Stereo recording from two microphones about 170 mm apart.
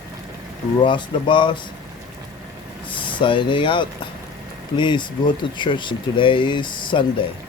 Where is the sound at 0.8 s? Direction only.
30° left (ahead or behind).